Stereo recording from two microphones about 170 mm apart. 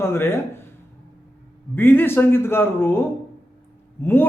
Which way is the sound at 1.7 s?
10° left (ahead or behind).